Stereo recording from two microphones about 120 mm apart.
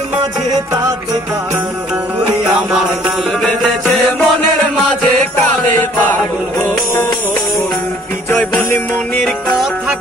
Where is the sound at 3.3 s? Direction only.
5° left (ahead or behind).